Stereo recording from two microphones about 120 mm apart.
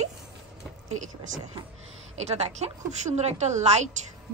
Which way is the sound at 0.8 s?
90° right.